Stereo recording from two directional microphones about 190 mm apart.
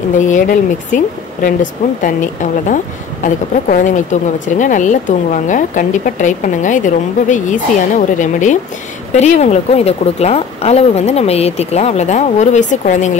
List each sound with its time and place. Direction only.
0.2 s speech: 40° left (ahead or behind)